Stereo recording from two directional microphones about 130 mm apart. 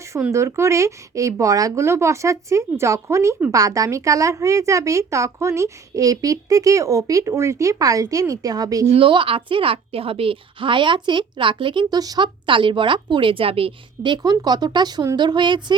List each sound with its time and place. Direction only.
0.1 s speech: 20° right (ahead or behind)
8.9 s a woman's voice: 40° right (ahead or behind)